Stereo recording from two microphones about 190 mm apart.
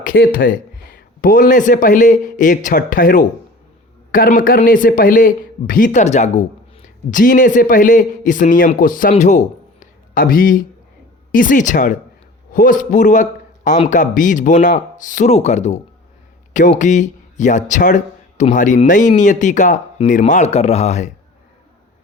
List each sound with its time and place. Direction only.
0.0 s a man's voice: 45° left (ahead or behind)
9.8 s a sound: 45° left (ahead or behind)
11.3 s a man's voice: 45° left (ahead or behind)